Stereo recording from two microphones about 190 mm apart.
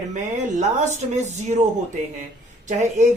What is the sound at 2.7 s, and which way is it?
Speech, 40° right (ahead or behind).